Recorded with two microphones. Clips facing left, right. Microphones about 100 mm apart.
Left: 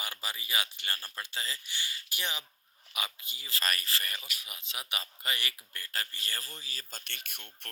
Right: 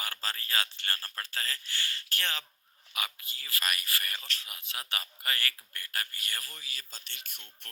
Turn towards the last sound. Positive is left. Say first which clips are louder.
# left 3 dB
turn(degrees=60)  # may be behind; listen again after turning